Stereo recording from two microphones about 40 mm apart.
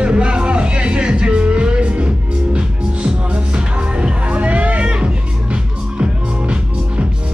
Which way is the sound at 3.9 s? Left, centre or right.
Right.